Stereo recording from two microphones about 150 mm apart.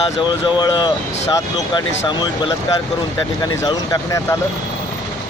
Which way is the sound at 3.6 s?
20° left (ahead or behind).